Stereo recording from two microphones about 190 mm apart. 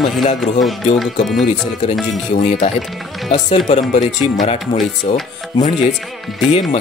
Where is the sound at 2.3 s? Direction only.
35° left (ahead or behind).